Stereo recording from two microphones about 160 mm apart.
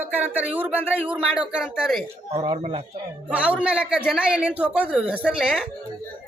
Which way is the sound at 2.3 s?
30° right (ahead or behind).